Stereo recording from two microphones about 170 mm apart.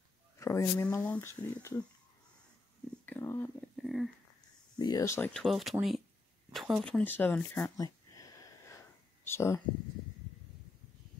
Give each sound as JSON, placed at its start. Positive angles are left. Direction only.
{"t": 0.4, "sound": "speech", "side_deg": 15}
{"t": 3.1, "sound": "speech", "side_deg": 15}
{"t": 3.7, "sound": "a sound", "side_deg": 0}
{"t": 4.7, "sound": "speech", "side_deg": 25}
{"t": 5.3, "sound": "speech", "side_deg": 0}
{"t": 7.8, "sound": "a sound", "side_deg": 20}